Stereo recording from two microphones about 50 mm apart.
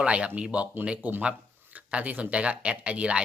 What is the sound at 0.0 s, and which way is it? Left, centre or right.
Speech, right.